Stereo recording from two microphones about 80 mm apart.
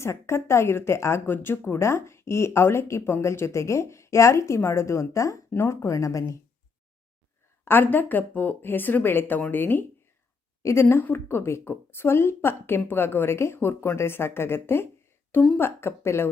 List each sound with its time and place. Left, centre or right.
0.0 s speech: left
5.5 s speech: left
5.8 s speech: left
7.6 s speech: left
10.6 s speech: left